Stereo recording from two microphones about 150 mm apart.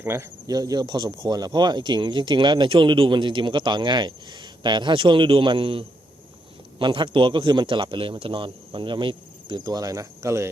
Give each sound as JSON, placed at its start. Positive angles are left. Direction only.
{"t": 0.0, "sound": "speech", "side_deg": -15}